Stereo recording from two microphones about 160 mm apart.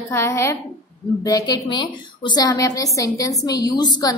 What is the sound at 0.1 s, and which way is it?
A woman's voice, 15° left (ahead or behind).